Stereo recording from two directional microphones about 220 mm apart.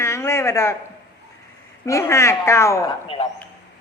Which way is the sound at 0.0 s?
10° left (ahead or behind).